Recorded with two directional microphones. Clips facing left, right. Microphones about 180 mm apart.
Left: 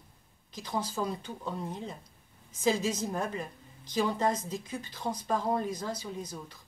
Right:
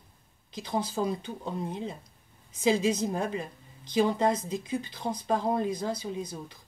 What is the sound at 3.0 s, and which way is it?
Speech, 15° right (ahead or behind).